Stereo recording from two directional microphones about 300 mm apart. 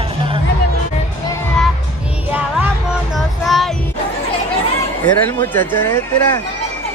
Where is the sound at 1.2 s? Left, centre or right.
Centre.